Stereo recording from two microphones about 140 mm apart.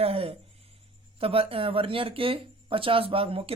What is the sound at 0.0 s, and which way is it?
Speech, 45° right (ahead or behind).